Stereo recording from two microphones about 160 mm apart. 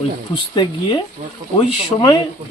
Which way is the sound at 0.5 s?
25° left (ahead or behind).